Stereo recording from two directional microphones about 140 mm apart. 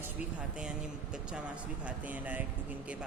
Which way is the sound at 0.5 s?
5° right (ahead or behind).